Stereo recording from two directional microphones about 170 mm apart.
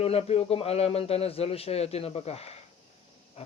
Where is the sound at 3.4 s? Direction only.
35° left (ahead or behind).